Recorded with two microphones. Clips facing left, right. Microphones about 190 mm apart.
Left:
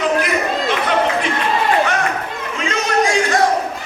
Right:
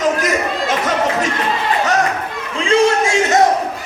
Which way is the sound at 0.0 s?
45° right (ahead or behind).